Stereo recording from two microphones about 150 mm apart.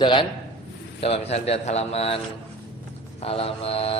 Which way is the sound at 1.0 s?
40° left (ahead or behind).